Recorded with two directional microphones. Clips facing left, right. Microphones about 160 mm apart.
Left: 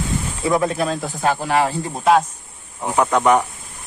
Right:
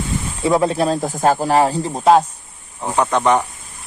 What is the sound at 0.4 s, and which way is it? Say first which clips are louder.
Speech: right 3 dB; 25° right (ahead or behind).